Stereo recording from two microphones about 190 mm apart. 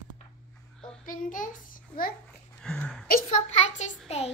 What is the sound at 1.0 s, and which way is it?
A child's voice, 45° left (ahead or behind).